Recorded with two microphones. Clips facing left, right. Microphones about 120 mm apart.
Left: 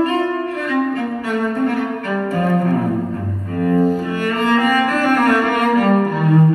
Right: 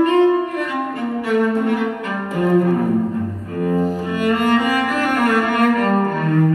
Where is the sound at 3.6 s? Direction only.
15° right (ahead or behind).